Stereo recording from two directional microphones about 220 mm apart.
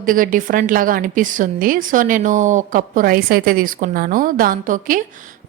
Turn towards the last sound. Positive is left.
turn(degrees=-35)  # may be behind; listen again after turning